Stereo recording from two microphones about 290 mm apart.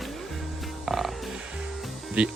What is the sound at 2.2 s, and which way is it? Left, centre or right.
Speech, centre.